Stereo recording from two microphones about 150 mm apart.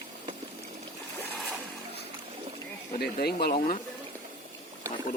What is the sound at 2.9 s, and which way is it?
Speech, 90° left.